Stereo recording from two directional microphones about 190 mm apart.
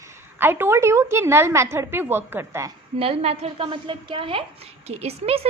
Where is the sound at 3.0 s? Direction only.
30° right (ahead or behind).